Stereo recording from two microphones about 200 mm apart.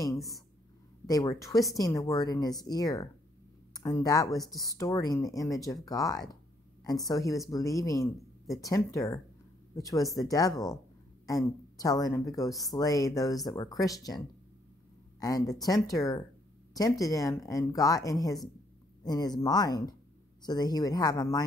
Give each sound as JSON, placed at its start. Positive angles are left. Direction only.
{"t": 1.0, "sound": "a woman's voice", "side_deg": 15}